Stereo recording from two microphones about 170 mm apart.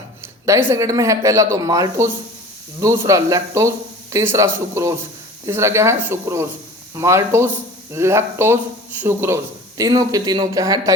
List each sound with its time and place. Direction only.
0.7 s speech: 20° right (ahead or behind)